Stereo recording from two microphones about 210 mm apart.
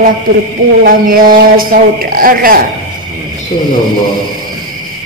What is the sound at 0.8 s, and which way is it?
Speech, 40° right (ahead or behind).